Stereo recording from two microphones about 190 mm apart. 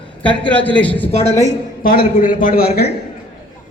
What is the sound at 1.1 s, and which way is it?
Speech, 35° left (ahead or behind).